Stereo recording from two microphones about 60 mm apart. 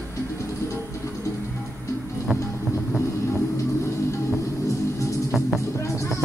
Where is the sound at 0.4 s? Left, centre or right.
Left.